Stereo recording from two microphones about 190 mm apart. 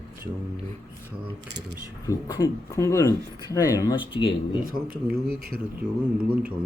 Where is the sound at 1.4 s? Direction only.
65° right (ahead or behind).